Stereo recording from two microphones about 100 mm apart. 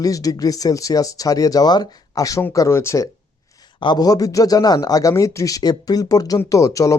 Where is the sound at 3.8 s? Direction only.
45° left (ahead or behind).